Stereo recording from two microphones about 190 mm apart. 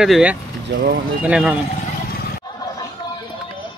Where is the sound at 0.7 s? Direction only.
65° right (ahead or behind).